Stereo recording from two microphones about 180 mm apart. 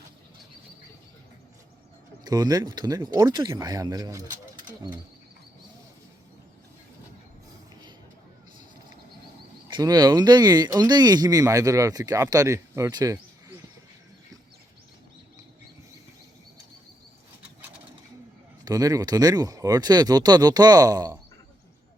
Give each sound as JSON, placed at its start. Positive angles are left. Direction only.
{"t": 2.2, "sound": "speech", "side_deg": -20}
{"t": 9.6, "sound": "speech", "side_deg": -25}
{"t": 18.6, "sound": "speech", "side_deg": -20}